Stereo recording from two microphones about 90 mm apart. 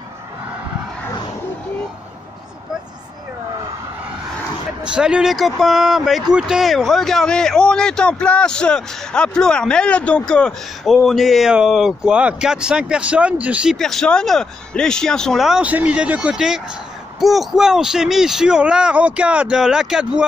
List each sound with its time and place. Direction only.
4.8 s speech: 10° right (ahead or behind)
13.7 s speech: 5° left (ahead or behind)
15.6 s speech: 15° right (ahead or behind)